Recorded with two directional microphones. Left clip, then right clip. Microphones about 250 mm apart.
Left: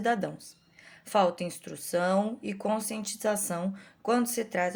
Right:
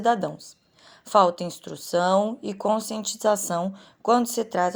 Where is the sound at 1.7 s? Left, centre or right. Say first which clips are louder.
Right 6 dB; centre.